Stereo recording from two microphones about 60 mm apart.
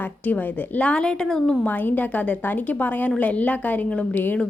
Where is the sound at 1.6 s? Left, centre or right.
Left.